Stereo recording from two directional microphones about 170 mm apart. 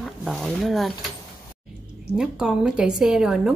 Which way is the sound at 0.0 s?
Centre (ahead or behind).